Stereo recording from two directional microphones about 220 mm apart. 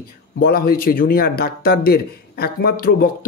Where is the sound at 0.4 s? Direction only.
45° left (ahead or behind).